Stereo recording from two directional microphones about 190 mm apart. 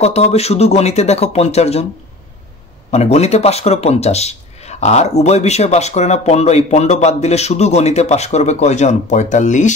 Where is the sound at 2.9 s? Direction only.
35° left (ahead or behind).